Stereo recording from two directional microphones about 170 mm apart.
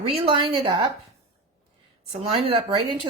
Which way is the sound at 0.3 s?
30° right (ahead or behind).